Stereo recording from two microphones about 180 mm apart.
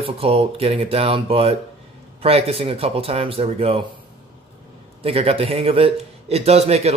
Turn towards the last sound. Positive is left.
turn(degrees=-35)  # may be behind; listen again after turning